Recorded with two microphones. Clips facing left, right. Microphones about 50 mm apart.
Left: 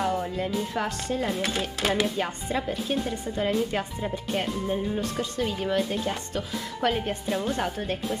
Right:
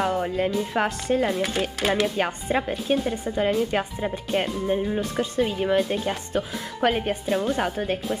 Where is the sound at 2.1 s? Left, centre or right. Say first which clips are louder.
Right 4 dB; right.